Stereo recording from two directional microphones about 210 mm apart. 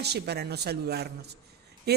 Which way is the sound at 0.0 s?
50° right (ahead or behind).